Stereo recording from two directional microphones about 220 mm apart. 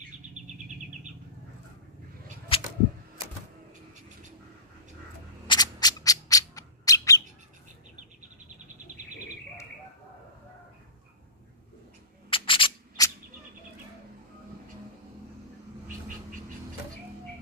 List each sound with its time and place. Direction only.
2.5 s a sound: 25° left (ahead or behind)
5.5 s bird: 20° left (ahead or behind)
12.3 s scissors: 25° left (ahead or behind)